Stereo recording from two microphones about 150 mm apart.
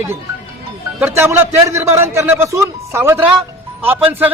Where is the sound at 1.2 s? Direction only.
15° right (ahead or behind).